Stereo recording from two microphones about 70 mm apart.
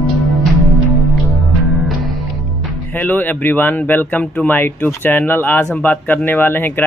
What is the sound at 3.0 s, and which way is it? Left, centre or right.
Speech, left.